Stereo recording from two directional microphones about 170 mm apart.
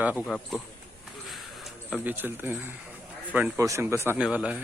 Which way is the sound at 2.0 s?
10° right (ahead or behind).